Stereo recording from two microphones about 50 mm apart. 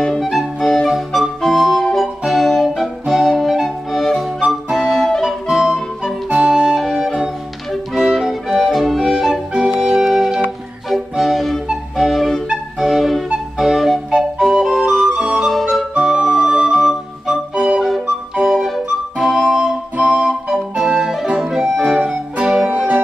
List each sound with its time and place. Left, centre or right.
0.2 s music: centre
2.0 s organ: centre
2.7 s music: centre
4.4 s music: centre
4.9 s music: centre
5.2 s music: centre
6.6 s music: centre
9.5 s organ: centre
10.9 s music: centre
12.0 s flute: centre
13.6 s music: centre
15.0 s music: centre
15.4 s music: centre
18.5 s music: centre; by 23.0 s right